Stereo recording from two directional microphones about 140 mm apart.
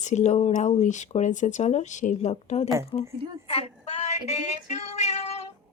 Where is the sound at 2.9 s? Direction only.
35° left (ahead or behind).